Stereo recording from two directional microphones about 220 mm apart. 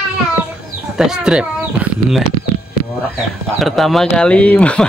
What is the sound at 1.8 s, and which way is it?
Bird, 5° right (ahead or behind).